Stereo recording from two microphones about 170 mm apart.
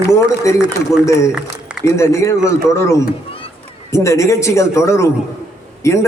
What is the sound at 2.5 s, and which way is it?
A man's voice, 15° left (ahead or behind).